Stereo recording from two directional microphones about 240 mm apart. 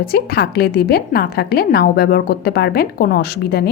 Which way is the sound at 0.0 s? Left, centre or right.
Left.